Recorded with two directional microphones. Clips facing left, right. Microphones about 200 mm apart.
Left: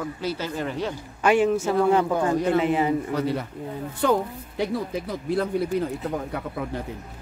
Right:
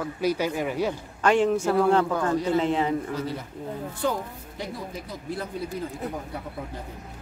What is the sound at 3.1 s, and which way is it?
Speech, 65° left (ahead or behind).